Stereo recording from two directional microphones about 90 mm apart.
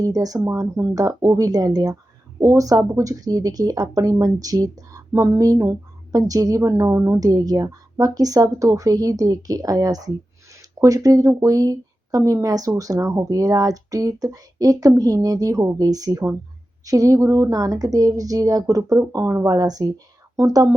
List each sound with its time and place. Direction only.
0.0 s a woman's voice: 40° right (ahead or behind)